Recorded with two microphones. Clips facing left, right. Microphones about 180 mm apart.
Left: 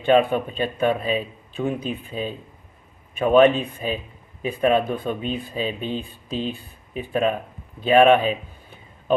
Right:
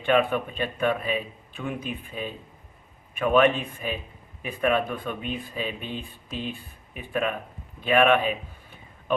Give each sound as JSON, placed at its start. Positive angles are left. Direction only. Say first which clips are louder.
{"t": 0.0, "sound": "speech", "louder": "left 5 dB", "side_deg": 25}